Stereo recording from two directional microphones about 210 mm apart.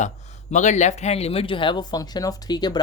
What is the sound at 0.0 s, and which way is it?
Speech, 35° left (ahead or behind).